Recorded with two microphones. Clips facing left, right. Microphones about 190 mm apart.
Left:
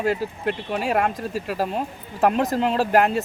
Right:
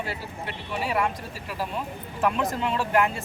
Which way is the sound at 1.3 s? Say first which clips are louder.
Left 7 dB; 45° left (ahead or behind).